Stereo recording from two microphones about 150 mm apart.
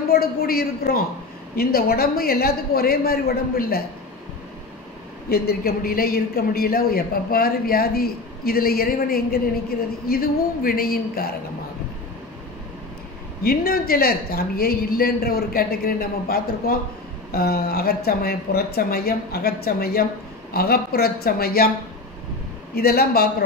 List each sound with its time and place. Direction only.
0.1 s a man's voice: 90° left
5.3 s a man's voice: 85° left
13.4 s a man's voice: 90° left
22.8 s a man's voice: 90° left